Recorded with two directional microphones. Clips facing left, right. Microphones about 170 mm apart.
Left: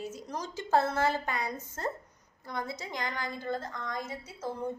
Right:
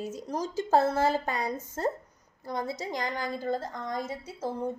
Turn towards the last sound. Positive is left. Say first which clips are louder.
# right 4 dB
turn(degrees=-35)  # may be behind; listen again after turning